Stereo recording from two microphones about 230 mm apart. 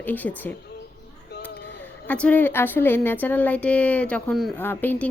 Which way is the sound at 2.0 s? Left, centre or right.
Centre.